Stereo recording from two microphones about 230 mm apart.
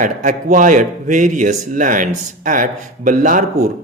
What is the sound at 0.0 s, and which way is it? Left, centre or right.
Speech, right.